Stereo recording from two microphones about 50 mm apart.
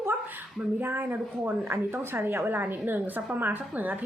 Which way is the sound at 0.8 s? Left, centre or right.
Right.